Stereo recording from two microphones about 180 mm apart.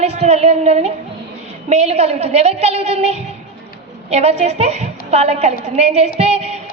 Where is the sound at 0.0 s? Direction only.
35° right (ahead or behind).